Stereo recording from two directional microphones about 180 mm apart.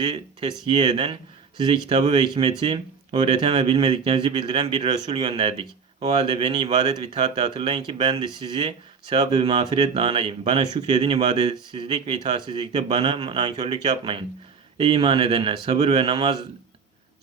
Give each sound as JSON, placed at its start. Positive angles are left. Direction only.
{"t": 0.0, "sound": "speech", "side_deg": -30}